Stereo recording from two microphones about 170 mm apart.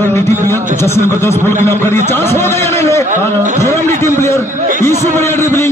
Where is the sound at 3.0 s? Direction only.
40° right (ahead or behind).